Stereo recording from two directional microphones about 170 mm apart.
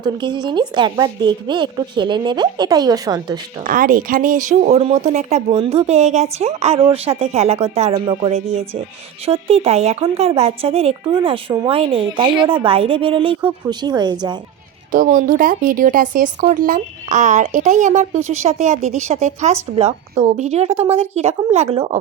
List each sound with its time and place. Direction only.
0.0 s a woman's voice: 25° right (ahead or behind)
3.6 s speech: 50° right (ahead or behind); by 14.3 s 25° right (ahead or behind)
14.9 s speech: 55° right (ahead or behind); by 21.9 s 35° right (ahead or behind)